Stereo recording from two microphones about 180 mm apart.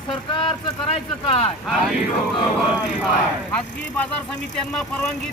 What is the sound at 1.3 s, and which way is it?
Speech, 35° left (ahead or behind).